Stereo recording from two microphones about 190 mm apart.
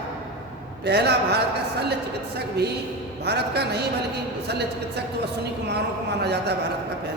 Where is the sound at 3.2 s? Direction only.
60° right (ahead or behind).